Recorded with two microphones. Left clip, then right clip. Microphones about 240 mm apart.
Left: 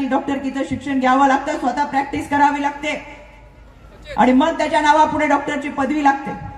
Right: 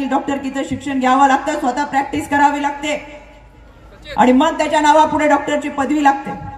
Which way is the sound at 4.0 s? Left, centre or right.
Right.